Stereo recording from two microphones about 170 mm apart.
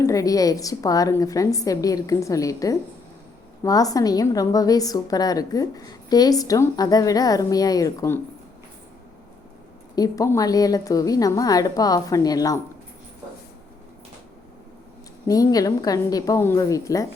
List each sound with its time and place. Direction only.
0.0 s a woman's voice: 20° left (ahead or behind)
9.9 s a woman's voice: 20° left (ahead or behind)
15.3 s a woman's voice: 20° left (ahead or behind)